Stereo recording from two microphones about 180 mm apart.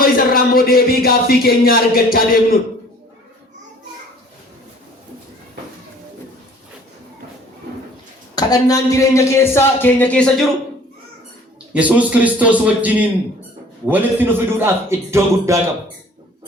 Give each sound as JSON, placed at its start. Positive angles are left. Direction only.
{"t": 0.0, "sound": "speech", "side_deg": 55}
{"t": 8.4, "sound": "speech", "side_deg": 20}
{"t": 11.7, "sound": "a man's voice", "side_deg": -5}